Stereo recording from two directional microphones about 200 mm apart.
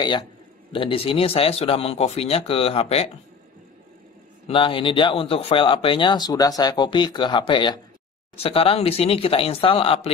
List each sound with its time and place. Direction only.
0.7 s speech: 25° left (ahead or behind)
4.5 s speech: 25° left (ahead or behind)